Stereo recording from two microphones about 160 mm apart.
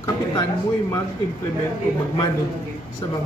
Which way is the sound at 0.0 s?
25° left (ahead or behind).